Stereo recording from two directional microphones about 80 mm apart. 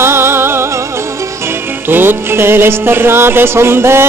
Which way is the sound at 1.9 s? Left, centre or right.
Right.